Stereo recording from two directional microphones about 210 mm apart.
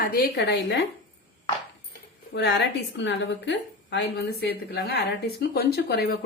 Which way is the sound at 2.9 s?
60° left (ahead or behind).